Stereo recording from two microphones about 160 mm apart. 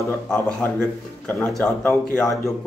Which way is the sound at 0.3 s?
5° left (ahead or behind).